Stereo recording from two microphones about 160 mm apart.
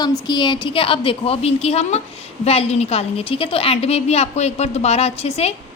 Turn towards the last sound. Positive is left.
turn(degrees=40)  # may be behind; listen again after turning